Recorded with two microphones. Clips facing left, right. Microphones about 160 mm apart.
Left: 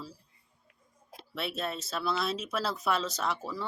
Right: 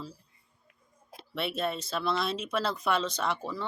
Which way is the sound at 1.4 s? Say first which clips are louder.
Right 3 dB; centre (ahead or behind).